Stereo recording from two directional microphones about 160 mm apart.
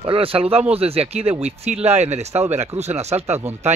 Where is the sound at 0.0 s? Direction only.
35° right (ahead or behind).